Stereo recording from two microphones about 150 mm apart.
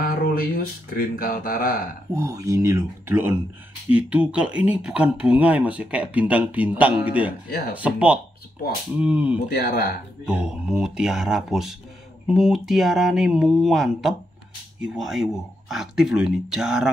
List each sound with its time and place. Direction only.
0.0 s speech: 80° left
2.1 s speech: 20° right (ahead or behind)
7.4 s speech: 90° left
7.8 s speech: 10° right (ahead or behind)
9.5 s speech: 90° left
10.2 s speech: 5° right (ahead or behind)